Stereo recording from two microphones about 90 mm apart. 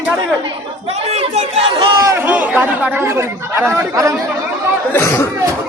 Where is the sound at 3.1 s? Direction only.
30° right (ahead or behind).